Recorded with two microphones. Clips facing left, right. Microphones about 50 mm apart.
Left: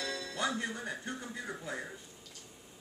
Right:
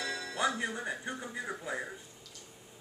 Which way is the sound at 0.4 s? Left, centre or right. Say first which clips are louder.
Right 3 dB; centre.